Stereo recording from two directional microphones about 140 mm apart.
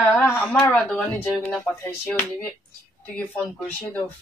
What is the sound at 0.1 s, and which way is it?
A woman's voice, 10° left (ahead or behind).